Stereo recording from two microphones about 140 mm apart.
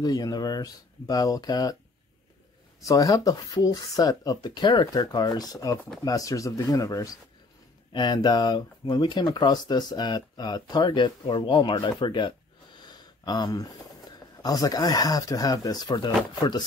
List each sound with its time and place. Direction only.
0.0 s speech: 30° left (ahead or behind)
2.8 s speech: 25° left (ahead or behind)